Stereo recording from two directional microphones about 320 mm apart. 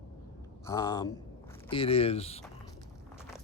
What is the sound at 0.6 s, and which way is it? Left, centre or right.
Speech, centre.